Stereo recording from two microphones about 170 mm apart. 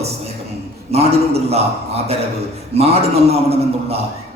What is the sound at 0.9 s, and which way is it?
A man's voice, 35° right (ahead or behind).